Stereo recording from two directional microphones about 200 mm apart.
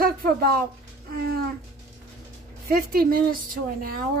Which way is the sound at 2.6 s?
45° right (ahead or behind).